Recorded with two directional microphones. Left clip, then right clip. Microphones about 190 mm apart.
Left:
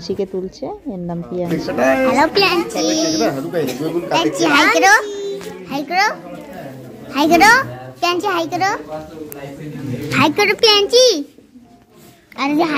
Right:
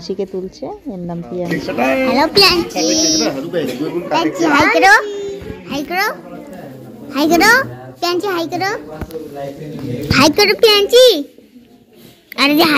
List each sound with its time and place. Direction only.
0.0 s a child's voice: centre (ahead or behind)
1.8 s speech: 55° left (ahead or behind)
2.0 s a child's voice: 5° left (ahead or behind)
3.3 s speech: 50° left (ahead or behind)
4.4 s a woman's voice: 10° left (ahead or behind)
5.0 s music: 25° left (ahead or behind)
5.7 s a child's voice: centre (ahead or behind)
10.1 s a child's voice: centre (ahead or behind)
12.4 s a woman's voice: 15° right (ahead or behind)